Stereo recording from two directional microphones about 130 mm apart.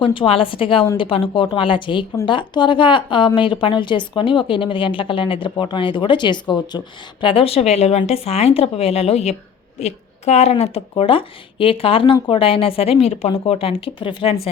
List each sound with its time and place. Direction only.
0.0 s a woman's voice: 40° left (ahead or behind)